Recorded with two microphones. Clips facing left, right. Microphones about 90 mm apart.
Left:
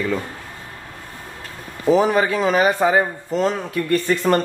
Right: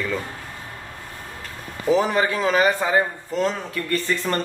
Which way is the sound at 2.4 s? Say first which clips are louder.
Left 2 dB; 15° left (ahead or behind).